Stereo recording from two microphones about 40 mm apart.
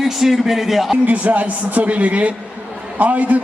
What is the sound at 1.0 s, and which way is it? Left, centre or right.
A man's voice, right.